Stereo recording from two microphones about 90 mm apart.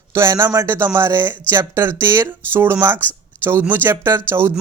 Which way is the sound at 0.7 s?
25° right (ahead or behind).